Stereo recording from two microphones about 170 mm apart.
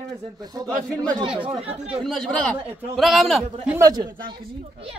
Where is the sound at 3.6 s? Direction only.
15° right (ahead or behind).